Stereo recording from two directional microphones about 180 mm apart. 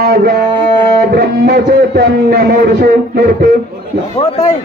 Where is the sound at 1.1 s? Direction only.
60° right (ahead or behind).